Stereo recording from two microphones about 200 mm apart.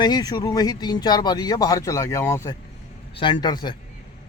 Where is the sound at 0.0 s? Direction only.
20° left (ahead or behind).